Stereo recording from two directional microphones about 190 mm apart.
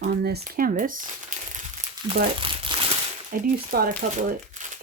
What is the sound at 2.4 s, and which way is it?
Crumpling, 25° right (ahead or behind).